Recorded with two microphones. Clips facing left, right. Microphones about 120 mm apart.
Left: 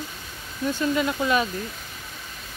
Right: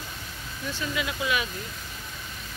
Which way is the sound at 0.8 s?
45° left (ahead or behind).